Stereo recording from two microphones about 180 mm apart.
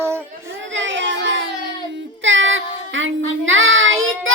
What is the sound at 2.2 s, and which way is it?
Child singing, 90° right.